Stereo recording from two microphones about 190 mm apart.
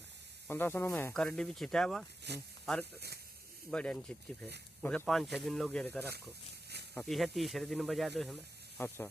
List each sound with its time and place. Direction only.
0.5 s speech: 10° left (ahead or behind)
2.3 s speech: 60° right (ahead or behind)
2.6 s speech: 5° left (ahead or behind)